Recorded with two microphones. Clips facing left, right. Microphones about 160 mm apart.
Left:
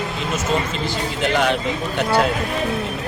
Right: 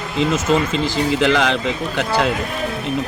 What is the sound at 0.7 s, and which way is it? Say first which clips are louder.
A man's voice: right 6 dB; 90° right.